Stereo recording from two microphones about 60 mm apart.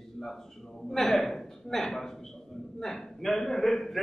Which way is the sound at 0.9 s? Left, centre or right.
Centre.